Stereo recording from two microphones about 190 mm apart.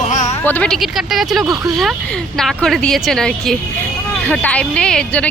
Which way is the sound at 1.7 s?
Centre (ahead or behind).